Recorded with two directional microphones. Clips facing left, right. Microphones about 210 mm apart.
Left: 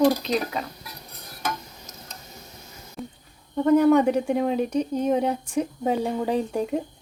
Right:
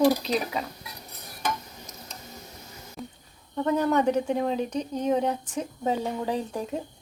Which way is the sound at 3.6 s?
10° left (ahead or behind).